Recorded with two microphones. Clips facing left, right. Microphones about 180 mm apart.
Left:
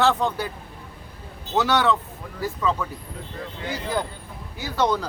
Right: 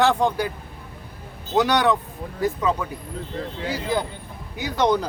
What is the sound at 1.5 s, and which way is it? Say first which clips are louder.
Speech: right 2 dB; 15° right (ahead or behind).